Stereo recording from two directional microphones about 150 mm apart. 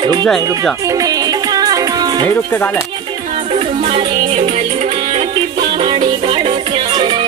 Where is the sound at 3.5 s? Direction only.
40° right (ahead or behind).